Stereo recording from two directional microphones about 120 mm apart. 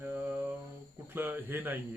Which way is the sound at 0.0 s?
15° right (ahead or behind).